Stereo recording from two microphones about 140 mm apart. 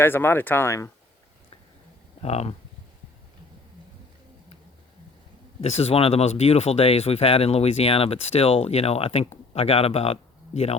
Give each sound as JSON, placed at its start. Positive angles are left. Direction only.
{"t": 0.0, "sound": "speech", "side_deg": 15}
{"t": 2.2, "sound": "speech", "side_deg": 50}
{"t": 5.5, "sound": "speech", "side_deg": 45}